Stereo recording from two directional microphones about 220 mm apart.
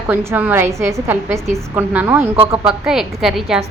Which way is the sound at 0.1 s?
10° right (ahead or behind).